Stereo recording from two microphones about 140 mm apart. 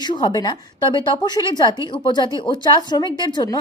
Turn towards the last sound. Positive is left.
turn(degrees=30)  # may be behind; listen again after turning